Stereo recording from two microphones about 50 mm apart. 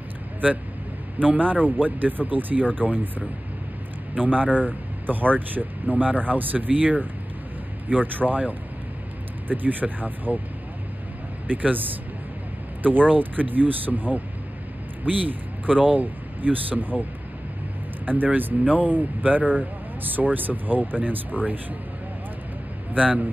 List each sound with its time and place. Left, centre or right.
1.2 s speech: right
4.1 s speech: right
11.4 s speech: right
13.1 s speech: right
18.0 s speech: right
22.9 s a man's voice: right